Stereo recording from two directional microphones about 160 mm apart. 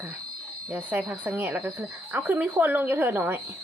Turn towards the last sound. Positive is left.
turn(degrees=-15)  # may be behind; listen again after turning